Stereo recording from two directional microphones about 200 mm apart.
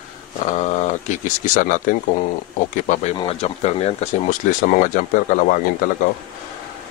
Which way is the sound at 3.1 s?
30° left (ahead or behind).